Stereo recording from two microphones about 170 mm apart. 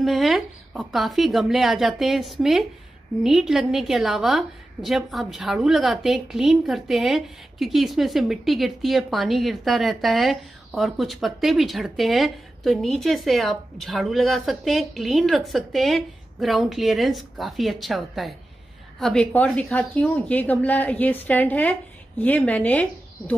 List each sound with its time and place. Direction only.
0.0 s a woman's voice: centre (ahead or behind)